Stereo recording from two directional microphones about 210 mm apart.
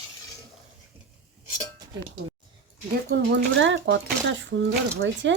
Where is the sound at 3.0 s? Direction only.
55° right (ahead or behind).